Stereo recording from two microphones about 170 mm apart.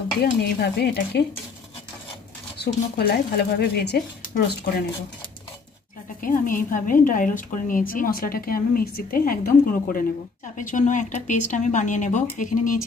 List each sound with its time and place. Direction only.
0.2 s speech: 70° left (ahead or behind)
2.6 s speech: 70° left (ahead or behind)
6.2 s a woman's voice: 55° left (ahead or behind)